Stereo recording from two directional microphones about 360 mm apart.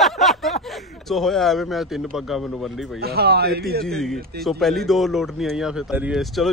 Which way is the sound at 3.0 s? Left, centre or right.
Right.